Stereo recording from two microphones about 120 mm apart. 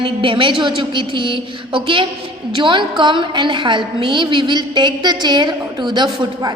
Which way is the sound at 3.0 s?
40° right (ahead or behind).